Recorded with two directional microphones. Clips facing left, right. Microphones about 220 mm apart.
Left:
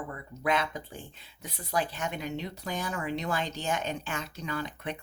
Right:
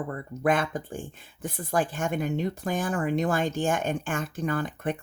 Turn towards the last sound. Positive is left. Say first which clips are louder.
# right 7 dB
turn(degrees=-50)  # may be behind; listen again after turning